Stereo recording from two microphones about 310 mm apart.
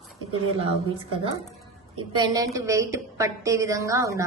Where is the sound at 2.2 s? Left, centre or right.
Centre.